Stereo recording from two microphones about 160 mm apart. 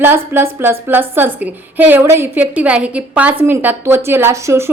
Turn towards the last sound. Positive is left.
turn(degrees=-20)  # may be behind; listen again after turning